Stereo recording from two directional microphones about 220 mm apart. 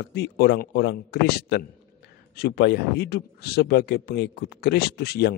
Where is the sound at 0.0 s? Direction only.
50° left (ahead or behind).